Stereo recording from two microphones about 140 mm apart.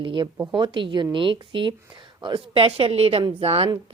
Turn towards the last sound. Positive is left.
turn(degrees=-45)  # may be behind; listen again after turning